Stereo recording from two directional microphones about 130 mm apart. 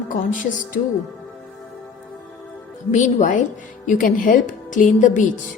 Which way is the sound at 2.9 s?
70° left (ahead or behind).